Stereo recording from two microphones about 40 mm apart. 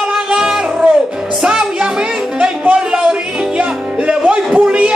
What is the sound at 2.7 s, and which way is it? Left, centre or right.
Music, right.